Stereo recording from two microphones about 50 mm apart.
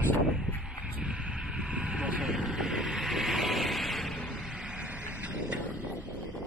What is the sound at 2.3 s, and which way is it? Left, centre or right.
Vehicle, centre.